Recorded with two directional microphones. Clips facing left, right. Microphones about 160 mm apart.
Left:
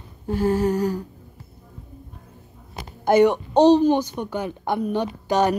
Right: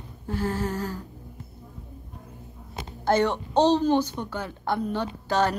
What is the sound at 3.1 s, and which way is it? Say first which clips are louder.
Speech: left 6 dB; 15° left (ahead or behind).